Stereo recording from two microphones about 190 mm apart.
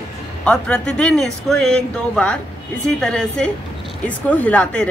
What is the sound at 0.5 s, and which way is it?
A woman's voice, 5° left (ahead or behind).